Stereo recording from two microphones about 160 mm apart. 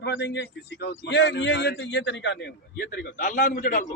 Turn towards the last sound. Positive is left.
turn(degrees=55)  # may be behind; listen again after turning